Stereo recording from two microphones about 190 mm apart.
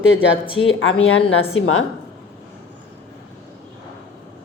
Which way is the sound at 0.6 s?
90° left.